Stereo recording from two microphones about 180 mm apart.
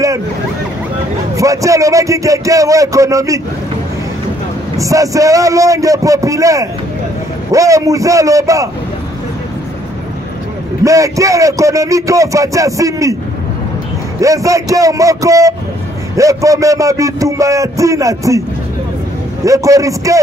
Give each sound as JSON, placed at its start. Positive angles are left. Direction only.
{"t": 1.3, "sound": "a man's voice", "side_deg": -15}
{"t": 4.7, "sound": "a man's voice", "side_deg": -20}
{"t": 10.8, "sound": "a man's voice", "side_deg": -20}
{"t": 14.2, "sound": "a man's voice", "side_deg": -20}
{"t": 19.4, "sound": "a man's voice", "side_deg": -15}